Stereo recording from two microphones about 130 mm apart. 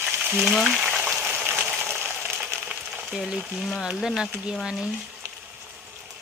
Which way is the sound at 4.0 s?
5° right (ahead or behind).